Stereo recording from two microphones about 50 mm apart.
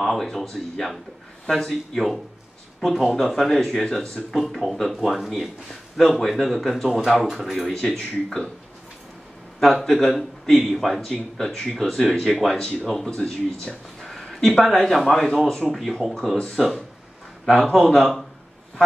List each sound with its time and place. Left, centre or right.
0.0 s speech: centre
7.6 s speech: centre
9.6 s speech: centre
14.0 s a sound: centre
14.6 s speech: centre